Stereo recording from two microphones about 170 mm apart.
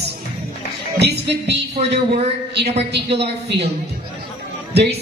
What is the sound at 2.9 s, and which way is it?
Speech, 80° right.